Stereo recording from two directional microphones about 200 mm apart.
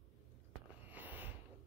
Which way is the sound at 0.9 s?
10° right (ahead or behind).